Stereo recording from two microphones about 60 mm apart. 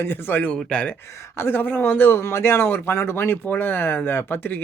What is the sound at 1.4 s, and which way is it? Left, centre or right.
A man's voice, left.